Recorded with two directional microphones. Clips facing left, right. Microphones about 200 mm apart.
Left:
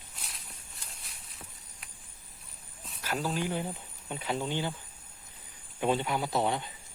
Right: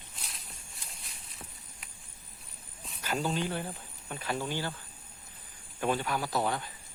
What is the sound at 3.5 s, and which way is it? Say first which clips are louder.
Speech: left 2 dB; 15° left (ahead or behind).